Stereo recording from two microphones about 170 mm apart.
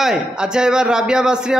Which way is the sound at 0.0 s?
5° right (ahead or behind).